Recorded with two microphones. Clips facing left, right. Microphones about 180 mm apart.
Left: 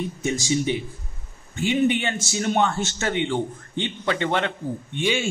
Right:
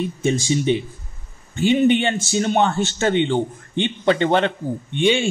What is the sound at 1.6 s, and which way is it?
A man's voice, 30° right (ahead or behind).